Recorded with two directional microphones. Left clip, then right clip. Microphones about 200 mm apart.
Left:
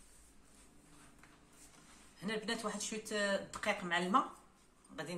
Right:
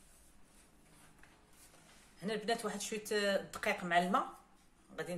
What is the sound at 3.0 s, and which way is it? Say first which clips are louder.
Speech: right 2 dB; 30° right (ahead or behind).